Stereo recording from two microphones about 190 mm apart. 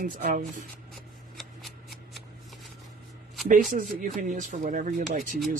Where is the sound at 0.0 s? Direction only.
45° right (ahead or behind).